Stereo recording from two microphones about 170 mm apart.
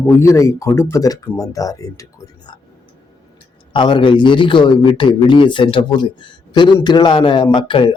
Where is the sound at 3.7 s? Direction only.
30° left (ahead or behind).